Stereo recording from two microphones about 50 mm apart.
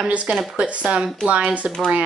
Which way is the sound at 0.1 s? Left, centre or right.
Right.